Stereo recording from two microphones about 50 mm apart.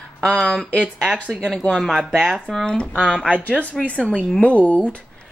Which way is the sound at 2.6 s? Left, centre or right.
Centre.